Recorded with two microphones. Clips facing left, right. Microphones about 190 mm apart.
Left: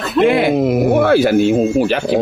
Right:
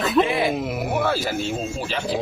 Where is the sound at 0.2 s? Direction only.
70° left (ahead or behind).